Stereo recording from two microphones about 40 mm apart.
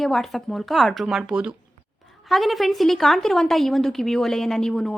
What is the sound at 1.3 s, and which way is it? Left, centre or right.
Speech, right.